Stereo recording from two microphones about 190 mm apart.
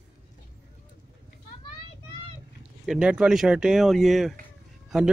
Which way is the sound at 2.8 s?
5° right (ahead or behind).